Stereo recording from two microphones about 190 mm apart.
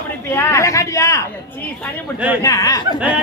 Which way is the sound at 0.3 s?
15° left (ahead or behind).